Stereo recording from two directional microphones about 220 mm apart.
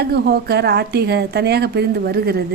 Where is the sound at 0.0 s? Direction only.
45° right (ahead or behind).